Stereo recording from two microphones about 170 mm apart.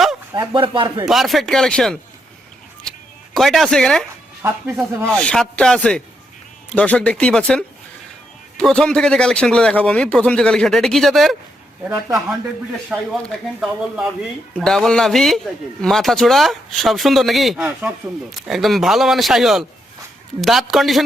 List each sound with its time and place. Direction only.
0.3 s speech: 30° right (ahead or behind)
1.0 s speech: centre (ahead or behind)
3.3 s speech: centre (ahead or behind)
4.4 s speech: 10° right (ahead or behind)
5.1 s speech: 5° left (ahead or behind)
11.9 s speech: 20° right (ahead or behind)
12.9 s speech: 5° right (ahead or behind)